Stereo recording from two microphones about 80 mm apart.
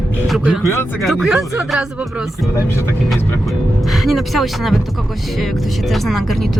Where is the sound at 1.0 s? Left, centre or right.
Centre.